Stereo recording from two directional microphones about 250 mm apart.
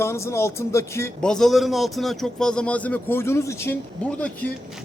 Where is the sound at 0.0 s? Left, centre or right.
Centre.